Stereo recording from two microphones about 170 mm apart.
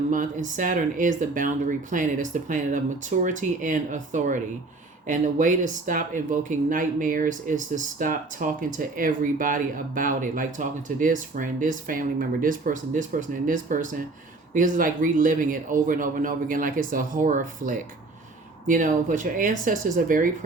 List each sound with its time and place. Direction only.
0.1 s speech: 50° right (ahead or behind)